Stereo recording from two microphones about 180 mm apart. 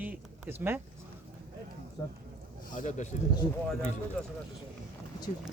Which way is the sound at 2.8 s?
45° left (ahead or behind).